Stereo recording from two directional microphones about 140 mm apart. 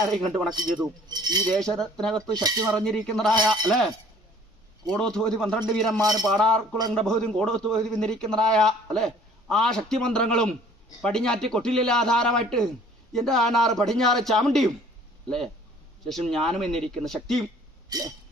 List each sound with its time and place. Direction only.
0.0 s a man's voice: centre (ahead or behind)
1.0 s cutlery: 30° right (ahead or behind)
1.5 s a man's voice: 5° left (ahead or behind)
2.3 s cutlery: 30° right (ahead or behind)
2.6 s a man's voice: 5° left (ahead or behind)
4.9 s a man's voice: 5° left (ahead or behind)
6.0 s cutlery: 25° right (ahead or behind)
6.3 s a man's voice: 5° left (ahead or behind)
16.0 s a man's voice: 5° left (ahead or behind)
17.8 s a sound: 25° right (ahead or behind)